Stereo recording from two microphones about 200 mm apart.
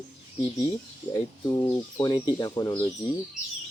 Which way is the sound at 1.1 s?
15° left (ahead or behind).